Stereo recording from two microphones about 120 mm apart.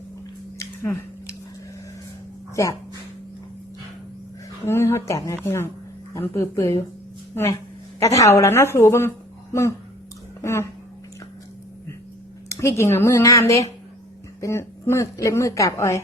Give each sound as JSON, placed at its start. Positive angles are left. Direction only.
{"t": 0.6, "sound": "a sound", "side_deg": 25}
{"t": 4.6, "sound": "a woman's voice", "side_deg": 20}
{"t": 8.1, "sound": "a woman's voice", "side_deg": 25}
{"t": 12.5, "sound": "a woman's voice", "side_deg": 25}